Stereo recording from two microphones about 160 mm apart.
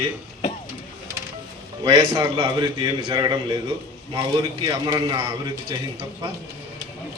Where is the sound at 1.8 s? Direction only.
30° right (ahead or behind).